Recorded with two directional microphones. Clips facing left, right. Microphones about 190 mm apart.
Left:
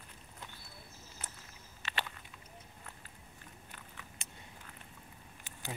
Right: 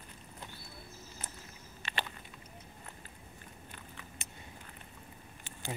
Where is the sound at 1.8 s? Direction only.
Centre (ahead or behind).